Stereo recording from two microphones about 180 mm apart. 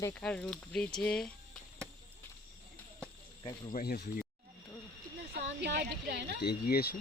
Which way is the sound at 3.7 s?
60° left (ahead or behind).